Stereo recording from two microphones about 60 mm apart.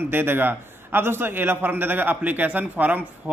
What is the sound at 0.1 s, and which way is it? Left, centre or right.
Speech, right.